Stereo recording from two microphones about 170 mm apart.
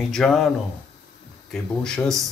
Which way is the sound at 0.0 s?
Centre (ahead or behind).